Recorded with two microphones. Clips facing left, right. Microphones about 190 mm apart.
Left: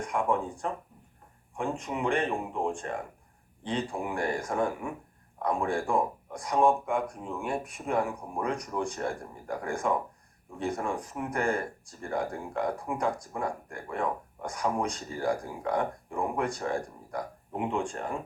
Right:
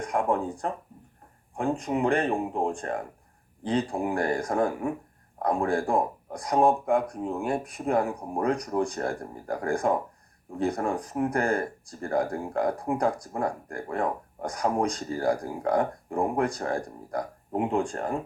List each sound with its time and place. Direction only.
0.1 s speech: 40° right (ahead or behind)